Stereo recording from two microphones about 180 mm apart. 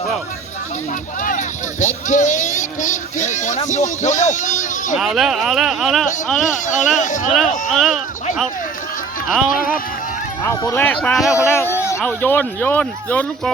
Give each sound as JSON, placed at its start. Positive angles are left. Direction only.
{"t": 1.2, "sound": "speech", "side_deg": 45}
{"t": 4.9, "sound": "speech", "side_deg": 0}
{"t": 6.4, "sound": "speech", "side_deg": 45}
{"t": 7.7, "sound": "speech", "side_deg": 0}
{"t": 9.5, "sound": "speech", "side_deg": 50}
{"t": 10.4, "sound": "speech", "side_deg": 15}
{"t": 11.5, "sound": "speech", "side_deg": 15}